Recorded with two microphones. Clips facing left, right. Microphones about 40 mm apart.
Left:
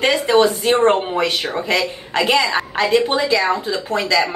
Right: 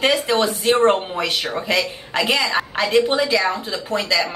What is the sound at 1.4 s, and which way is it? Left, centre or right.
Speech, left.